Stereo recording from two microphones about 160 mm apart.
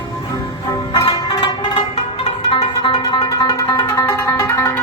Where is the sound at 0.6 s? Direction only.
25° left (ahead or behind).